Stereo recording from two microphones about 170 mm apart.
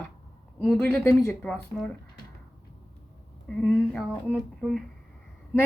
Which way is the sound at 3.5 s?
5° left (ahead or behind).